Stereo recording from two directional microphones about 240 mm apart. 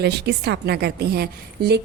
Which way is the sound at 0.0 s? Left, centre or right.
Right.